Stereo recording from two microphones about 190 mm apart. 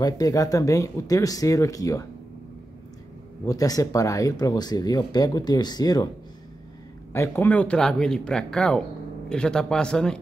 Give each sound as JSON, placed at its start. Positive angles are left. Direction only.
{"t": 0.0, "sound": "speech", "side_deg": 20}
{"t": 3.4, "sound": "speech", "side_deg": 20}
{"t": 7.1, "sound": "speech", "side_deg": 10}